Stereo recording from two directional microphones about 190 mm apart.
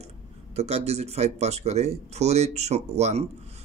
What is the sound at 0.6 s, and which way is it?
Speech, 35° right (ahead or behind).